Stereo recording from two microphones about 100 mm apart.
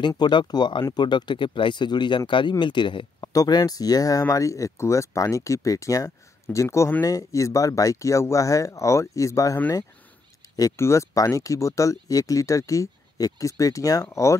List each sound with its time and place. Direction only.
0.2 s speech: 50° left (ahead or behind)
3.3 s speech: 40° left (ahead or behind)